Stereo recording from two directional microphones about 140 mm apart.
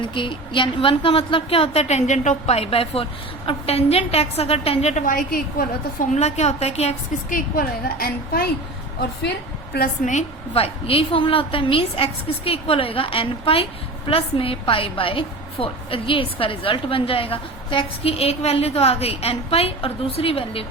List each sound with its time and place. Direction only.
0.0 s a woman's voice: 35° left (ahead or behind); by 6.1 s 85° left
6.1 s a woman's voice: 50° left (ahead or behind)
7.3 s a woman's voice: 85° left
9.7 s a woman's voice: 75° left (ahead or behind); by 20.7 s 40° left (ahead or behind)